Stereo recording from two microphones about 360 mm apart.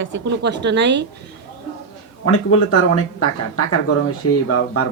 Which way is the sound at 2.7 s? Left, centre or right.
Left.